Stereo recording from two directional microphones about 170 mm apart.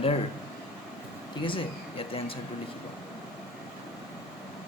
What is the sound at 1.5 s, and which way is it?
Speech, 30° left (ahead or behind).